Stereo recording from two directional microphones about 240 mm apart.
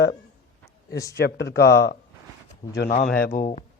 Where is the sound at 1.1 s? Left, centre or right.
Left.